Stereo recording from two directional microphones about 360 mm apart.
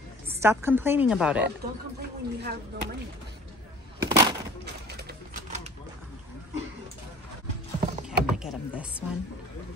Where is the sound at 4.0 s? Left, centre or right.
Centre.